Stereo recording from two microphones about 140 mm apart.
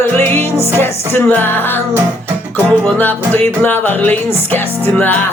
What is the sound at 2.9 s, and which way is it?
Music, 15° left (ahead or behind).